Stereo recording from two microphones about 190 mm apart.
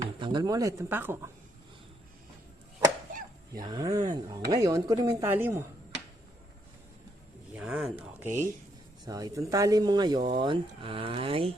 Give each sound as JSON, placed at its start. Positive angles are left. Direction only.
{"t": 0.2, "sound": "speech", "side_deg": -25}
{"t": 3.1, "sound": "a sound", "side_deg": -45}
{"t": 3.6, "sound": "speech", "side_deg": -20}
{"t": 7.5, "sound": "speech", "side_deg": -5}